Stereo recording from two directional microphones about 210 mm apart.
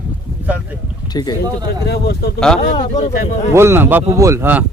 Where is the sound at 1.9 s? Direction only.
50° left (ahead or behind).